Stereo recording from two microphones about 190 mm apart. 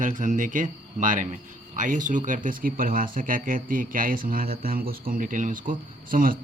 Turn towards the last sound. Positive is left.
turn(degrees=-45)  # may be behind; listen again after turning